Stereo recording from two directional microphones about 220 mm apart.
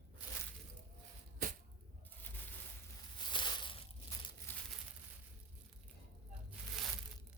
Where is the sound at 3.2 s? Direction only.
20° left (ahead or behind).